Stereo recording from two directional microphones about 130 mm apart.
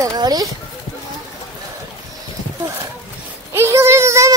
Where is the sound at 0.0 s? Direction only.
30° right (ahead or behind).